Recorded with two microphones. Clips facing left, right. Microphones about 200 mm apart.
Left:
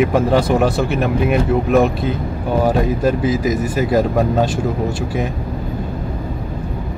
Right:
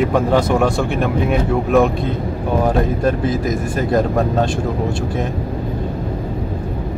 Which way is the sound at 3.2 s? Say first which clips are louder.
Left 2 dB; 5° left (ahead or behind).